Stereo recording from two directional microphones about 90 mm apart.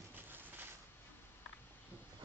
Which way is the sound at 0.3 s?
20° right (ahead or behind).